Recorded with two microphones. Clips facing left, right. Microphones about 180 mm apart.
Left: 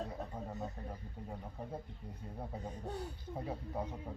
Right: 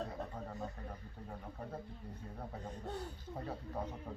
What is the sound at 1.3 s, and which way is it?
Speech, 10° left (ahead or behind).